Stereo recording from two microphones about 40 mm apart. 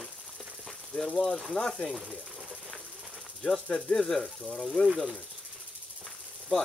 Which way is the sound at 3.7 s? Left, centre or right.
Centre.